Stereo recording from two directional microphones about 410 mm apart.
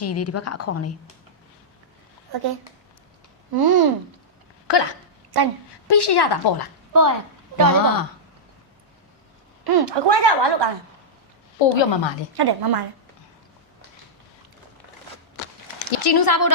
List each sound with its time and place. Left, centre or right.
0.0 s a woman's voice: left
2.3 s speech: right
3.5 s a woman's voice: right
4.7 s a woman's voice: left
5.3 s a woman's voice: right
5.9 s a woman's voice: left
6.9 s a woman's voice: right
9.6 s a woman's voice: right
11.8 s a woman's voice: left
12.4 s a woman's voice: right
15.9 s speech: left